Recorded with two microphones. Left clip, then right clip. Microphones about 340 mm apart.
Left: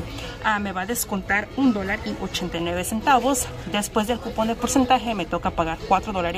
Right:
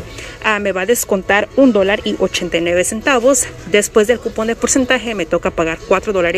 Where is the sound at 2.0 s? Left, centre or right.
Left.